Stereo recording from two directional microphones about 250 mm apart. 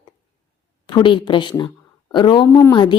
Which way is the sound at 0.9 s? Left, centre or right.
Centre.